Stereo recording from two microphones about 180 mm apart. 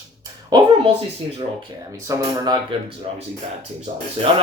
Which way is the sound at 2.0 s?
20° right (ahead or behind).